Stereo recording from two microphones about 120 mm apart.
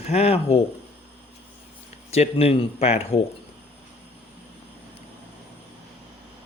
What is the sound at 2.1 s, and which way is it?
Speech, 60° left (ahead or behind).